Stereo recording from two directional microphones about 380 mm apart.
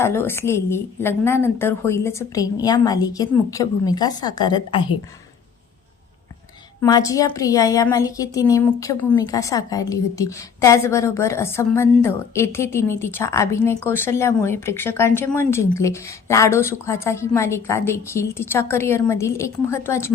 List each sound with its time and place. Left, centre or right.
0.0 s a woman's voice: centre
6.8 s a woman's voice: centre